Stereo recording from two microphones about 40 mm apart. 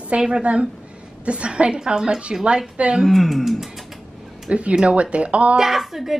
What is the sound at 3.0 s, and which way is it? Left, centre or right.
Speech, centre.